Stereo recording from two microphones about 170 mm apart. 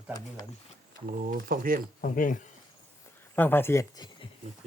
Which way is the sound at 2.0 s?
50° left (ahead or behind).